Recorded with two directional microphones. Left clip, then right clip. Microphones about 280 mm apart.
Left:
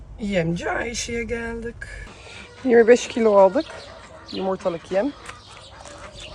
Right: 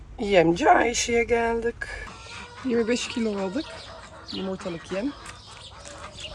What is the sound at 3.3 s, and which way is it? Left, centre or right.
Speech, left.